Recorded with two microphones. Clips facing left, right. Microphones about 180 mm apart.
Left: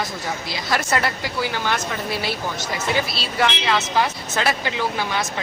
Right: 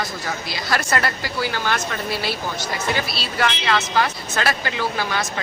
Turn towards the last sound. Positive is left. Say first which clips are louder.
# even
turn(degrees=20)  # may be behind; listen again after turning